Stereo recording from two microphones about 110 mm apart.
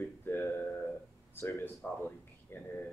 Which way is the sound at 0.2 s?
20° left (ahead or behind).